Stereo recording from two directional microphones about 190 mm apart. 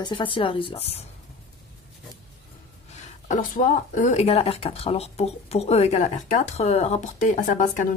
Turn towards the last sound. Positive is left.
turn(degrees=40)  # may be behind; listen again after turning